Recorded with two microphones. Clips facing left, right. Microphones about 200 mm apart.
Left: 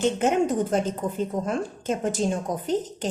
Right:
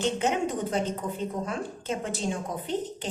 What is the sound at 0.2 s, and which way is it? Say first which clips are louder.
A woman's voice: left 5 dB; 50° left (ahead or behind).